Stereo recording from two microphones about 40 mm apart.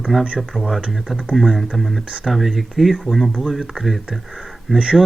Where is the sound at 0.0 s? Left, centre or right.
Centre.